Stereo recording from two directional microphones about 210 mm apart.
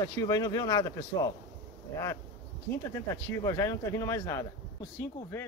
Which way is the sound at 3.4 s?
15° left (ahead or behind).